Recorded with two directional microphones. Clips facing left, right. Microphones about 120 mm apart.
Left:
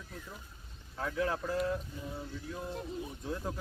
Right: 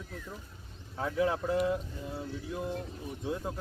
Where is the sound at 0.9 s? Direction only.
15° right (ahead or behind).